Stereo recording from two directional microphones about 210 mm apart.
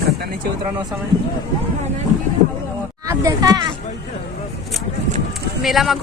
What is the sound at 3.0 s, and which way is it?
Speech, 15° right (ahead or behind).